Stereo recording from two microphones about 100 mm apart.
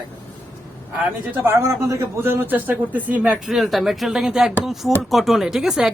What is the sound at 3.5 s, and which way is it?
Speech, centre (ahead or behind).